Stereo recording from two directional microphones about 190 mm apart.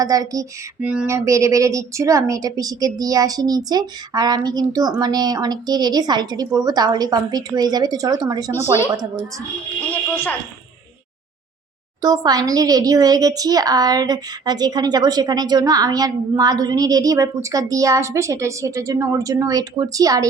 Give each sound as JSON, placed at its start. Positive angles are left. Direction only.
{"t": 0.0, "sound": "a child's voice", "side_deg": -20}
{"t": 0.8, "sound": "a child's voice", "side_deg": -5}
{"t": 12.0, "sound": "a child's voice", "side_deg": -20}